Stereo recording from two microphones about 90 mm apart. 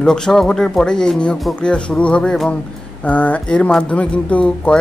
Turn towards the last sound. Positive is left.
turn(degrees=15)  # may be behind; listen again after turning